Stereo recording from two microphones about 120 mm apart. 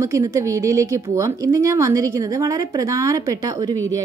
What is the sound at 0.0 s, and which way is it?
A woman's voice, 25° right (ahead or behind).